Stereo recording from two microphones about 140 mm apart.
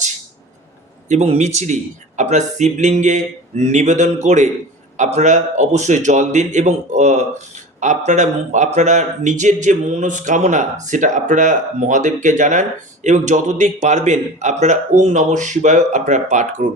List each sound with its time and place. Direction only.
1.0 s a man's voice: 55° right (ahead or behind)